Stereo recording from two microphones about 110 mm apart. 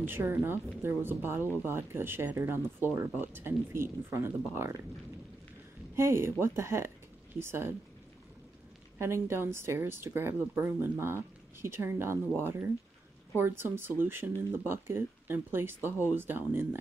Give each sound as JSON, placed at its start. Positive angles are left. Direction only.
{"t": 0.0, "sound": "speech", "side_deg": -20}
{"t": 5.9, "sound": "speech", "side_deg": -25}
{"t": 8.9, "sound": "speech", "side_deg": -25}